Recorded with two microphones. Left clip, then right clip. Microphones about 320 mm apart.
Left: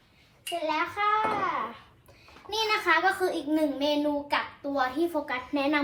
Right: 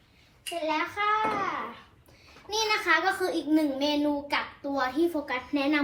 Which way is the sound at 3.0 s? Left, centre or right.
Centre.